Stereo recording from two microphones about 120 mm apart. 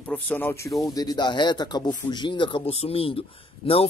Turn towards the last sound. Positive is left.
turn(degrees=50)  # may be behind; listen again after turning